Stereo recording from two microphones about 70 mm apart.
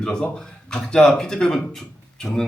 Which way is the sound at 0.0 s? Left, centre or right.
Centre.